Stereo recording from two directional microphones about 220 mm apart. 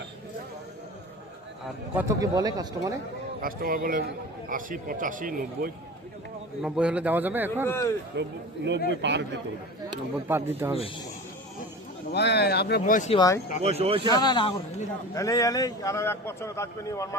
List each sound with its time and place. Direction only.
2.0 s a man's voice: 15° right (ahead or behind)
3.4 s a man's voice: 40° right (ahead or behind)
6.6 s a man's voice: 5° right (ahead or behind)
7.7 s a man's voice: 15° left (ahead or behind)
8.1 s speech: 50° right (ahead or behind)
10.2 s a man's voice: 10° right (ahead or behind)
12.1 s speech: 50° left (ahead or behind)
13.1 s a man's voice: 15° left (ahead or behind)
13.6 s speech: 30° right (ahead or behind)
14.2 s a man's voice: 20° left (ahead or behind)